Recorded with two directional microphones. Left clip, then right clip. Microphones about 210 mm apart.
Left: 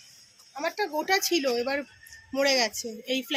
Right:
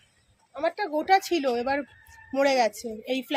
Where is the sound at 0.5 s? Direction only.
50° right (ahead or behind).